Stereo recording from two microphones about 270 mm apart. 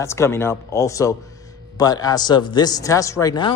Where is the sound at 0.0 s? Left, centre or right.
Centre.